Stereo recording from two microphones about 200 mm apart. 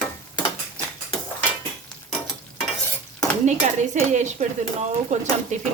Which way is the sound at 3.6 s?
35° right (ahead or behind).